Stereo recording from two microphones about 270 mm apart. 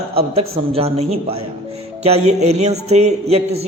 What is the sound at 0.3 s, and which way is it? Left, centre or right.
Speech, right.